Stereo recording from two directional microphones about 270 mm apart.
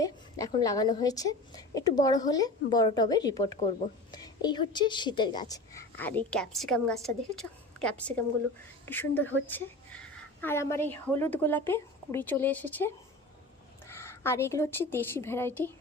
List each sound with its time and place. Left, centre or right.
0.0 s a woman's voice: centre